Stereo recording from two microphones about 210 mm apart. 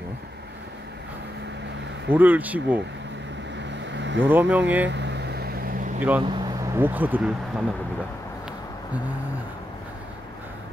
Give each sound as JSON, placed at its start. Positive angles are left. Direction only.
{"t": 2.0, "sound": "speech", "side_deg": -10}
{"t": 3.9, "sound": "vehicle", "side_deg": -60}
{"t": 4.3, "sound": "speech", "side_deg": -10}
{"t": 4.8, "sound": "vehicle", "side_deg": -55}
{"t": 5.9, "sound": "speech", "side_deg": -10}